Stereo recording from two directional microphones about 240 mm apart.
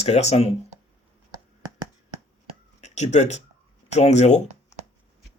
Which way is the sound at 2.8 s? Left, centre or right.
Left.